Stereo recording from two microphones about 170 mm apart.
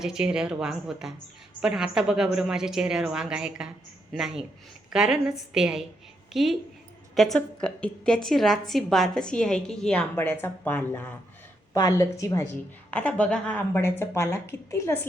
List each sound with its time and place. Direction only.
0.0 s a woman's voice: 5° right (ahead or behind); by 14.9 s 15° left (ahead or behind)